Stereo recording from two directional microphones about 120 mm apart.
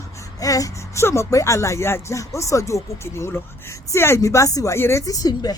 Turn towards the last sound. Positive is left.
turn(degrees=35)  # may be behind; listen again after turning